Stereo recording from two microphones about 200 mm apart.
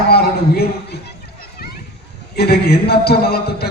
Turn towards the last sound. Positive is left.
turn(degrees=50)  # may be behind; listen again after turning